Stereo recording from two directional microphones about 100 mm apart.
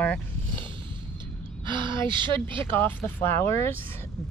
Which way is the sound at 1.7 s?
50° right (ahead or behind).